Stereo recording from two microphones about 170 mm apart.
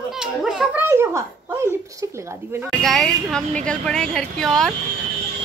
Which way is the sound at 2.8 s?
Centre (ahead or behind).